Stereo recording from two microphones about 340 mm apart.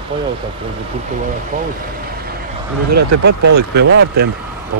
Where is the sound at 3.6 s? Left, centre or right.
Right.